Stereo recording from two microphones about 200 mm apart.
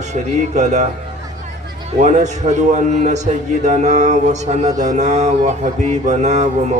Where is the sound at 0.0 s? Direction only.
35° right (ahead or behind).